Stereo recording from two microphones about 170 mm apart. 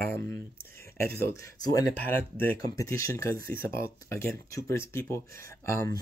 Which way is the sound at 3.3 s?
60° right (ahead or behind).